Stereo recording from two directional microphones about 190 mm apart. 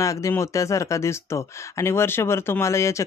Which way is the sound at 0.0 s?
15° left (ahead or behind).